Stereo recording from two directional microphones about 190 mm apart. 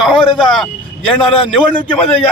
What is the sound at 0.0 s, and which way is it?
Speech, centre (ahead or behind).